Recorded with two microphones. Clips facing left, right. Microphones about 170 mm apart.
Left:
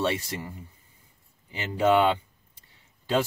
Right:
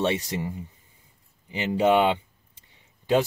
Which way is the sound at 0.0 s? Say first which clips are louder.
Right 2 dB; 15° right (ahead or behind).